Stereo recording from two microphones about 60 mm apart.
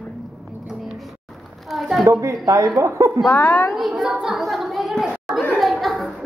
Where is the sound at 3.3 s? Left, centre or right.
Left.